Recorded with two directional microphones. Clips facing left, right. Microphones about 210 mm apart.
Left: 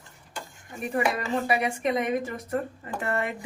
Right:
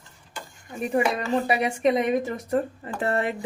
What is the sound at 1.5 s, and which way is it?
Speech, 25° right (ahead or behind).